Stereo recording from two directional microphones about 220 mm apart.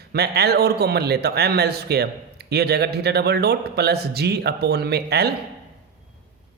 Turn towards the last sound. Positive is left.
turn(degrees=-45)  # may be behind; listen again after turning